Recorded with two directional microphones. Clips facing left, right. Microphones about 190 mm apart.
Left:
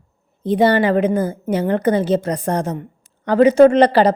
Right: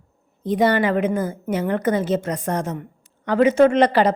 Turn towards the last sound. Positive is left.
turn(degrees=35)  # may be behind; listen again after turning